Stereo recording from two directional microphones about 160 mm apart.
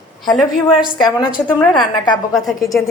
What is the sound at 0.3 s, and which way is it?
Speech, centre (ahead or behind).